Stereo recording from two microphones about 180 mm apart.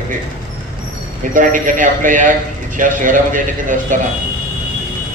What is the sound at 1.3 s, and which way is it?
A man's voice, 45° right (ahead or behind).